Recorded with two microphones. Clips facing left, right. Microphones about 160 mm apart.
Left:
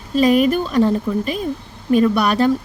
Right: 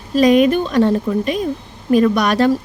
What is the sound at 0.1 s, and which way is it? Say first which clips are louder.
Speech: right 2 dB; 5° left (ahead or behind).